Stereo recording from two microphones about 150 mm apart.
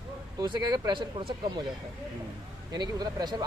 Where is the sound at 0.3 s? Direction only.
30° right (ahead or behind).